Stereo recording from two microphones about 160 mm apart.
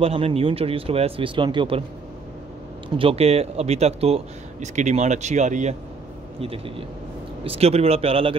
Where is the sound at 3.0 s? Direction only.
40° right (ahead or behind).